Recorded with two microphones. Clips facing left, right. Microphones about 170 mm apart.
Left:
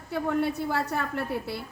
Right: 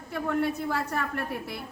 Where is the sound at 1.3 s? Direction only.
15° right (ahead or behind).